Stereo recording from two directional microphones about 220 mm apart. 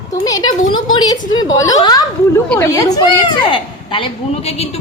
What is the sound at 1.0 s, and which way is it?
A woman's voice, 20° left (ahead or behind).